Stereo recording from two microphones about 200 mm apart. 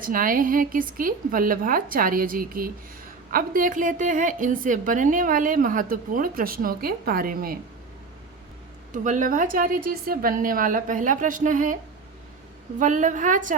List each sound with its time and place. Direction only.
0.0 s a woman's voice: 45° right (ahead or behind)
8.9 s a woman's voice: 40° right (ahead or behind)
12.8 s a woman's voice: 40° right (ahead or behind)